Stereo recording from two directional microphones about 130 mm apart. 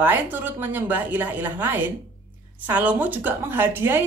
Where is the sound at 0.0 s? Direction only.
15° right (ahead or behind).